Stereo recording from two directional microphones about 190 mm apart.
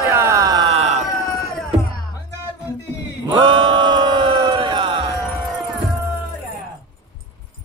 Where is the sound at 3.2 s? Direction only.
30° right (ahead or behind).